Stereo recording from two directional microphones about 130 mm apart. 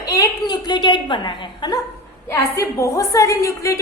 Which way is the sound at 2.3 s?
25° left (ahead or behind).